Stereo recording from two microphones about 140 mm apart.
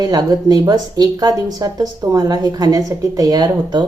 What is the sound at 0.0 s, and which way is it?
Speech, 25° right (ahead or behind).